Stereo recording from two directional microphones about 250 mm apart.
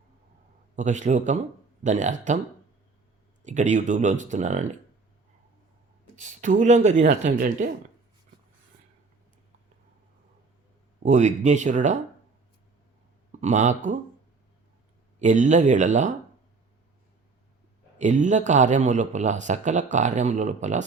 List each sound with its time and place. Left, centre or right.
0.8 s speech: right
3.4 s speech: right
6.1 s a woman's voice: right
11.0 s speech: right
13.4 s speech: right
15.2 s speech: right
17.9 s speech: right